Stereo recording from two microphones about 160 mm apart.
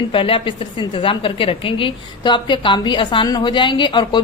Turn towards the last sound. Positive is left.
turn(degrees=30)  # may be behind; listen again after turning